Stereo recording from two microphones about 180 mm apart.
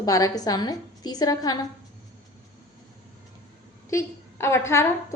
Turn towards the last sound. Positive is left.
turn(degrees=15)  # may be behind; listen again after turning